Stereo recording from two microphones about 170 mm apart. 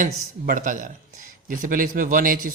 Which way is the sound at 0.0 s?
50° right (ahead or behind).